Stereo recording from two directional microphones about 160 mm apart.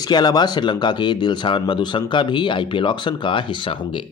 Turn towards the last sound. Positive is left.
turn(degrees=30)  # may be behind; listen again after turning